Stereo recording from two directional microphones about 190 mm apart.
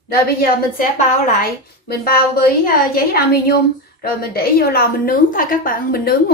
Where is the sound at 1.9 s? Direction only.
55° left (ahead or behind).